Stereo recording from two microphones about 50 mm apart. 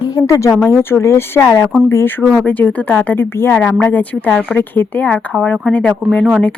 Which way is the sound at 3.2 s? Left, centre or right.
Left.